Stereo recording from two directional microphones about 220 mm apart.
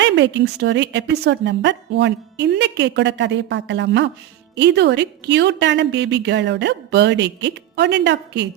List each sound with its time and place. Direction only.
0.0 s a woman's voice: 55° right (ahead or behind)